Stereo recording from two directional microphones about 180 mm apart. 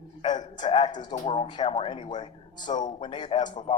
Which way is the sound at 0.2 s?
25° left (ahead or behind).